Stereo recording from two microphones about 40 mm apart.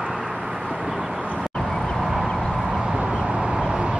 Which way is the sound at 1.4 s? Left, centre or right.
Centre.